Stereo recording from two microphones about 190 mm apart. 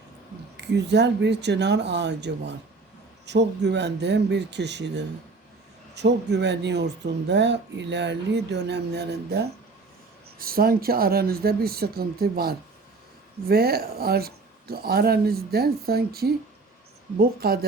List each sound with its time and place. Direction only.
0.5 s speech: 65° right (ahead or behind)